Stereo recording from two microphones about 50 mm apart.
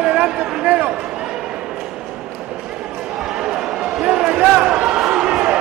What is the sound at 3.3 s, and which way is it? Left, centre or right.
Basketball bounce, centre.